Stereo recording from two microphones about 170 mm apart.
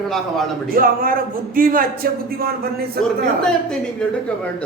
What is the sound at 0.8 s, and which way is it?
A man's voice, 60° right (ahead or behind).